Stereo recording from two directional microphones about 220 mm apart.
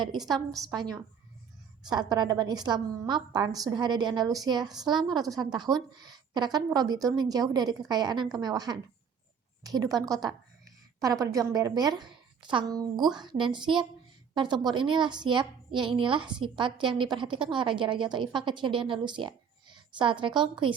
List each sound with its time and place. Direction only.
0.0 s a woman's voice: 20° right (ahead or behind)
1.9 s a woman's voice: 20° right (ahead or behind)
4.6 s a woman's voice: centre (ahead or behind)
5.5 s a woman's voice: 20° right (ahead or behind)